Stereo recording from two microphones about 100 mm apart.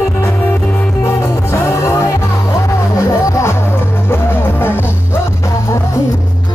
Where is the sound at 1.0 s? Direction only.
30° left (ahead or behind).